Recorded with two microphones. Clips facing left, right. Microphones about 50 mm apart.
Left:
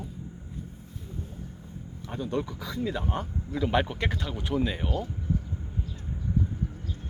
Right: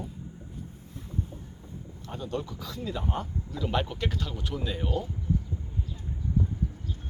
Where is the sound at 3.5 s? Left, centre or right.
Left.